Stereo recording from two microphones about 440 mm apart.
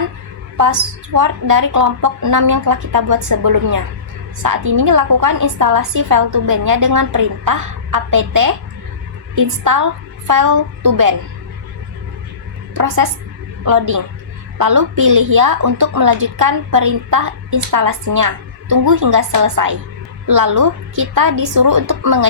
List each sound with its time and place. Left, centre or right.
0.5 s a woman's voice: right
12.7 s a woman's voice: right